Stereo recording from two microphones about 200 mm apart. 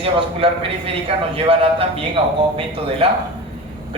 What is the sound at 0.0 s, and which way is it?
Speech, 30° right (ahead or behind).